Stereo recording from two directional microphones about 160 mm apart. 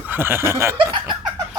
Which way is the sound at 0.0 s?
10° right (ahead or behind).